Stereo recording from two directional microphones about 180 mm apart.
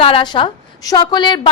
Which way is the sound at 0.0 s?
30° left (ahead or behind).